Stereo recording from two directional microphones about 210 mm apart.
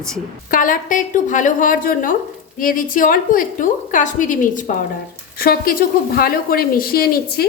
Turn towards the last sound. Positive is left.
turn(degrees=45)  # may be behind; listen again after turning